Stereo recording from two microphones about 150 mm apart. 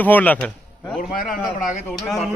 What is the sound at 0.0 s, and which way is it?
Speech, 10° left (ahead or behind).